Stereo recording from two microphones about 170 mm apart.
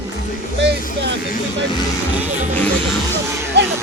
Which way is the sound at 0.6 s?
90° right.